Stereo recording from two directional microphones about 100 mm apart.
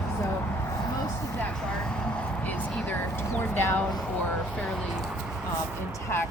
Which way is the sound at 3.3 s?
20° left (ahead or behind).